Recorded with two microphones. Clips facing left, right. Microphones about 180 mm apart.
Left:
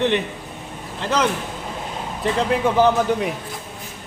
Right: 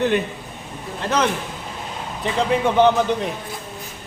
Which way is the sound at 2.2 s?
Centre (ahead or behind).